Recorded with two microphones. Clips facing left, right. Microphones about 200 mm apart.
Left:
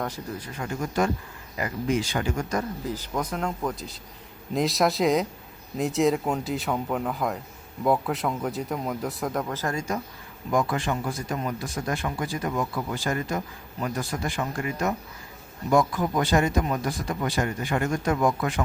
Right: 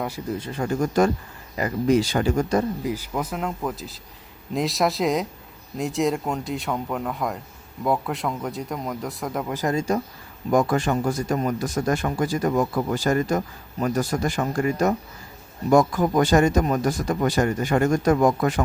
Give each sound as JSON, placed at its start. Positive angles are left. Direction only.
{"t": 0.3, "sound": "speech", "side_deg": -25}
{"t": 0.6, "sound": "speech", "side_deg": -40}
{"t": 2.8, "sound": "speech", "side_deg": -10}
{"t": 9.5, "sound": "speech", "side_deg": -15}
{"t": 10.5, "sound": "speech", "side_deg": -45}